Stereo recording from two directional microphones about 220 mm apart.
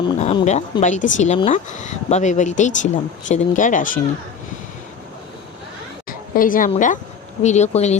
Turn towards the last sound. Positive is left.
turn(degrees=30)  # may be behind; listen again after turning